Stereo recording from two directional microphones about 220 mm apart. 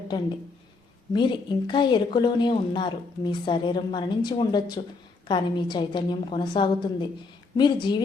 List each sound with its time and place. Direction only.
1.1 s a woman's voice: 20° left (ahead or behind)